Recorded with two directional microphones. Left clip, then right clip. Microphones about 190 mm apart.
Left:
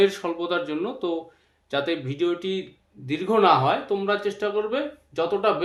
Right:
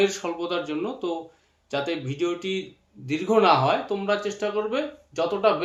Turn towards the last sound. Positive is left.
turn(degrees=25)  # may be behind; listen again after turning